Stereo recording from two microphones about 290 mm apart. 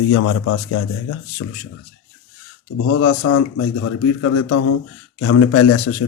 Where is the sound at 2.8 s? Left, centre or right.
Left.